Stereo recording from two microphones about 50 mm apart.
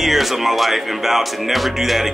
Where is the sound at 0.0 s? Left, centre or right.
Centre.